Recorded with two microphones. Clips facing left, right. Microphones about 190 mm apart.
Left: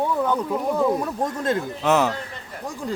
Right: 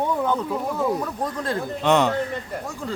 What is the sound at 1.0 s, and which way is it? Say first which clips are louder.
Speech: left 3 dB; 25° left (ahead or behind).